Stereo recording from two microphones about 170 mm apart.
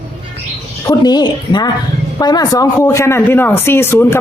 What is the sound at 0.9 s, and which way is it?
A woman's voice, 25° left (ahead or behind).